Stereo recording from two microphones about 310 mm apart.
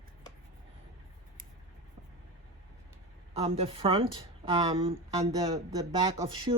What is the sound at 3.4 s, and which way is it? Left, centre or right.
Speech, centre.